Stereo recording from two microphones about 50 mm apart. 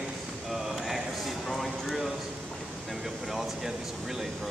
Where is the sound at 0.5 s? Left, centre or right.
Centre.